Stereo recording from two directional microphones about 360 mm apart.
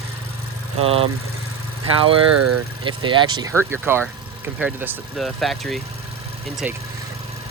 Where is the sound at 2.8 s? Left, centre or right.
Centre.